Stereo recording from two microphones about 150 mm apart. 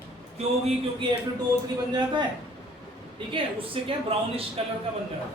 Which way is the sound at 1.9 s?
30° right (ahead or behind).